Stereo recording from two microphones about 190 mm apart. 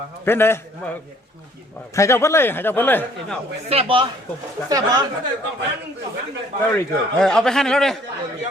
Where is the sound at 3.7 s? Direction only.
30° right (ahead or behind).